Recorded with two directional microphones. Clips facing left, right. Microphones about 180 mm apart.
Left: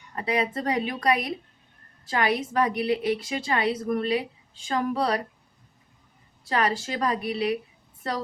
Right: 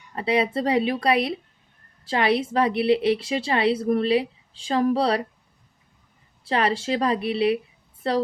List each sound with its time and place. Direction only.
0.2 s a woman's voice: 25° right (ahead or behind)
6.4 s a woman's voice: 30° right (ahead or behind)